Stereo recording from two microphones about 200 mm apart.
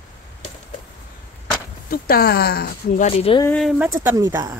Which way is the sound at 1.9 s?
50° left (ahead or behind).